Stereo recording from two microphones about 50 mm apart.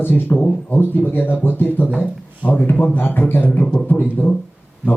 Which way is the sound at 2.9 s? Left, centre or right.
Left.